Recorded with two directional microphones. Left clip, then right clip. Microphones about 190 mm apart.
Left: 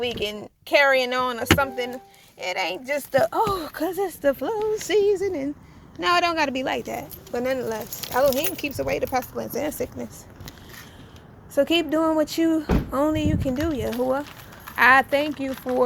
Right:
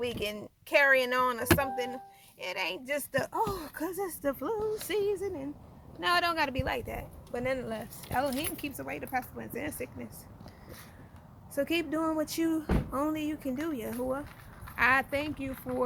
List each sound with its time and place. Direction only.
0.0 s speech: centre (ahead or behind)
4.9 s speech: 20° left (ahead or behind)
7.6 s speech: 5° left (ahead or behind)
8.5 s speech: 25° left (ahead or behind)
11.5 s speech: 10° left (ahead or behind)